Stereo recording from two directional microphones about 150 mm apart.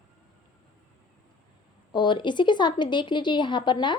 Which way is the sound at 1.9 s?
30° left (ahead or behind).